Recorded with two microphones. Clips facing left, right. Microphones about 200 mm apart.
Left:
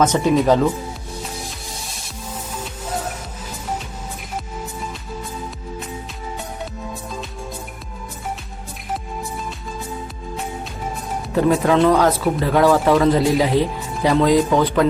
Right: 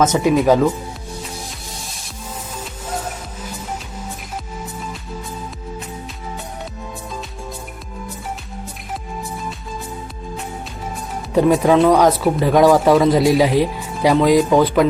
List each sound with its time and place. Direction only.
0.0 s speech: 10° right (ahead or behind)
11.3 s speech: 15° right (ahead or behind)